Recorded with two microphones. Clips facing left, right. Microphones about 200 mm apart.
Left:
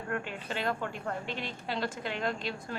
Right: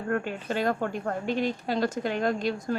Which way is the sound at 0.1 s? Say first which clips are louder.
Right 7 dB; 45° right (ahead or behind).